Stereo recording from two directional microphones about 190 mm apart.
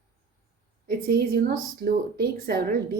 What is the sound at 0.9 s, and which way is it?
A woman's voice, 55° right (ahead or behind).